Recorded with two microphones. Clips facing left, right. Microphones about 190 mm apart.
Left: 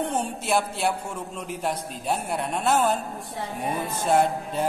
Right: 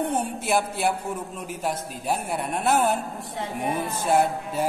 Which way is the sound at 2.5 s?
55° right (ahead or behind).